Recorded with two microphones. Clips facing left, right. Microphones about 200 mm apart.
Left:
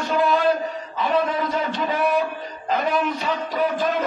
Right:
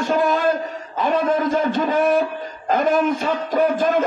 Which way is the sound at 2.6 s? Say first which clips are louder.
Right 5 dB; 50° right (ahead or behind).